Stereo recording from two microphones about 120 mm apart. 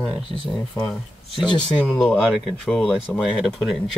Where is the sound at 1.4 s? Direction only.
Centre (ahead or behind).